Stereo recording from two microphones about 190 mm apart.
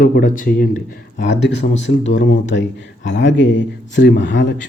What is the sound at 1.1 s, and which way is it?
Speech, 70° left (ahead or behind).